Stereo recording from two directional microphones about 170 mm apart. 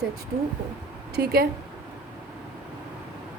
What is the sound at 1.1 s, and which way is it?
Speech, 65° right (ahead or behind).